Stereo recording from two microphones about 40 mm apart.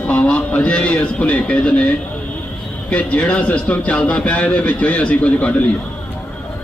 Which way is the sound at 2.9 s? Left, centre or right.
Left.